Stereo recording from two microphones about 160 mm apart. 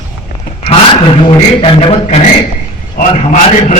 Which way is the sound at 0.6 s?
35° left (ahead or behind).